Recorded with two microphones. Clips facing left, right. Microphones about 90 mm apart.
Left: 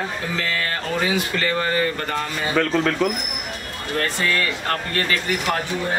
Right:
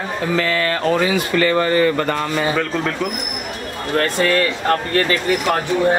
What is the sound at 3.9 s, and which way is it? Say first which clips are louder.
Speech: right 6 dB; 50° right (ahead or behind).